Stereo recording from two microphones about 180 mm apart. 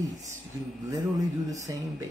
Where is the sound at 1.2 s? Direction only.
20° right (ahead or behind).